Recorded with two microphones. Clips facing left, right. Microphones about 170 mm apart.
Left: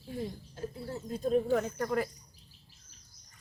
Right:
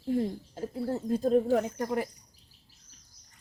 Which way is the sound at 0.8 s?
55° right (ahead or behind).